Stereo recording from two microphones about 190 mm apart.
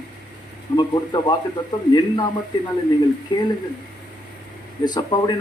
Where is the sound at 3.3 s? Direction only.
25° left (ahead or behind).